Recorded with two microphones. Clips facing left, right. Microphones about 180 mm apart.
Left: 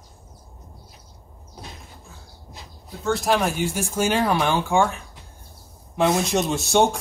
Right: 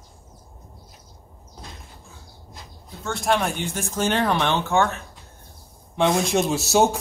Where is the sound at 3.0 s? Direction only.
Centre (ahead or behind).